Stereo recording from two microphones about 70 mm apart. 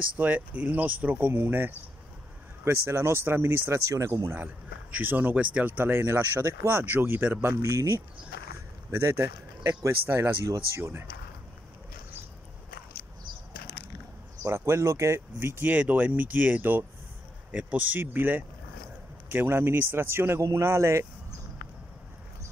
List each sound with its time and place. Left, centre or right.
0.2 s speech: right
3.9 s speech: right
4.9 s speech: right
6.3 s speech: right
6.8 s speech: right
7.6 s speech: right
14.4 s speech: right
15.3 s speech: right
15.7 s speech: right